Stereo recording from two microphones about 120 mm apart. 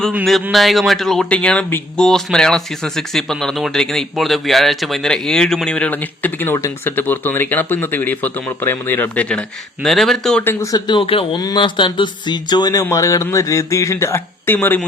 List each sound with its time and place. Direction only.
0.5 s speech: centre (ahead or behind)
9.8 s speech: centre (ahead or behind)
10.4 s speech: 20° left (ahead or behind)
10.7 s speech: 35° left (ahead or behind)
11.3 s speech: 35° left (ahead or behind); by 14.8 s 15° left (ahead or behind)